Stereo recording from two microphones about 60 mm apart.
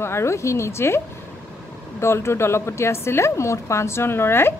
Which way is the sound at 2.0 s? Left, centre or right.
Left.